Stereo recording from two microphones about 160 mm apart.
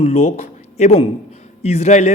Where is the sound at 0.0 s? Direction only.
40° left (ahead or behind).